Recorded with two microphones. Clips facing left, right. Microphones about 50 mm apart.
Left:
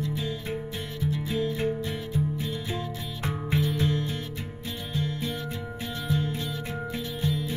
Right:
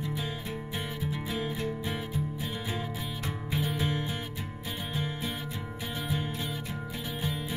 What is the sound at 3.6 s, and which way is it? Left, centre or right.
Music, centre.